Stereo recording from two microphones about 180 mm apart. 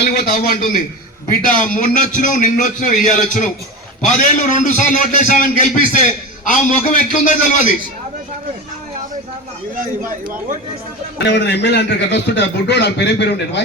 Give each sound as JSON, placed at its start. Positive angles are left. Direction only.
{"t": 0.0, "sound": "a man's voice", "side_deg": 55}
{"t": 9.7, "sound": "speech", "side_deg": -50}
{"t": 11.2, "sound": "a man's voice", "side_deg": 70}